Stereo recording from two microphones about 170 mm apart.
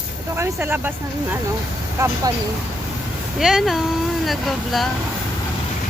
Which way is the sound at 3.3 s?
Centre (ahead or behind).